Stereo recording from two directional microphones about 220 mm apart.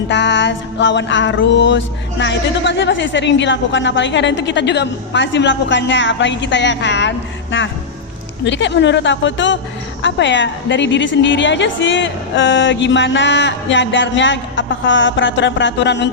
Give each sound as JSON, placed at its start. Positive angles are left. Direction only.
{"t": 0.1, "sound": "music", "side_deg": 55}